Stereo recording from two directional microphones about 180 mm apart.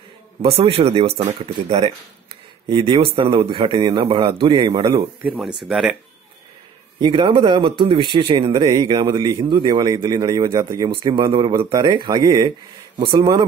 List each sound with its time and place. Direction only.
0.4 s a man's voice: 30° right (ahead or behind)
5.2 s speech: centre (ahead or behind)
7.0 s a man's voice: 30° right (ahead or behind)